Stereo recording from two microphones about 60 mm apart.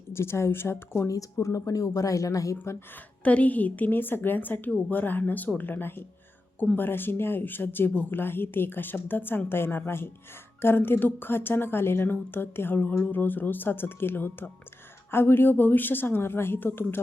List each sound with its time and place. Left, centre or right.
0.1 s speech: left
1.0 s speech: left
3.2 s speech: left